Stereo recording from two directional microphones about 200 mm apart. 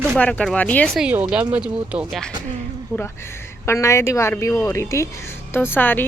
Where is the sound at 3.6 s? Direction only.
15° left (ahead or behind).